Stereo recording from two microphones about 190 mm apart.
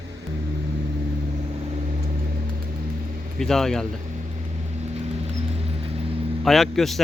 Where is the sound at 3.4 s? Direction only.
Centre (ahead or behind).